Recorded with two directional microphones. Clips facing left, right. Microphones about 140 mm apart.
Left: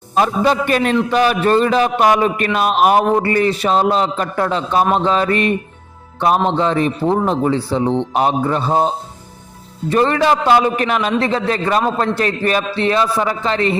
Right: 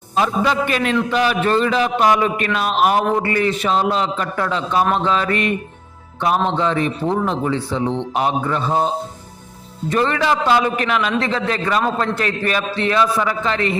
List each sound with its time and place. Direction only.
0.2 s a man's voice: 40° left (ahead or behind)
6.6 s a man's voice: 35° left (ahead or behind)
9.9 s a man's voice: 35° left (ahead or behind)